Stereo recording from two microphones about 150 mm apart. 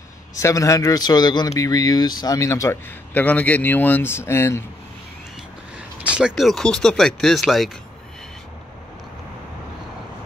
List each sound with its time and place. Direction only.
0.4 s speech: 20° left (ahead or behind)
6.0 s speech: 5° right (ahead or behind)